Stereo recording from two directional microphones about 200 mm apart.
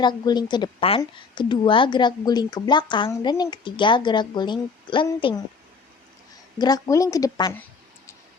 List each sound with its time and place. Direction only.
0.0 s a woman's voice: 20° left (ahead or behind)
6.6 s speech: 20° left (ahead or behind)